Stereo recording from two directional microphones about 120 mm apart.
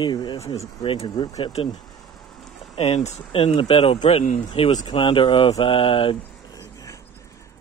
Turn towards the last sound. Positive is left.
turn(degrees=30)  # may be behind; listen again after turning